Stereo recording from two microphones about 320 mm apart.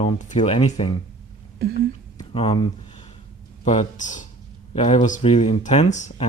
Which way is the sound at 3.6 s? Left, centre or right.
Left.